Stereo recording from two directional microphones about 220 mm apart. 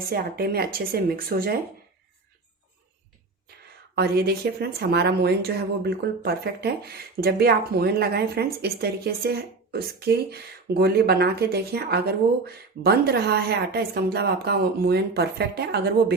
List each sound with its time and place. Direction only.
0.1 s speech: 45° right (ahead or behind)
3.9 s speech: 45° right (ahead or behind)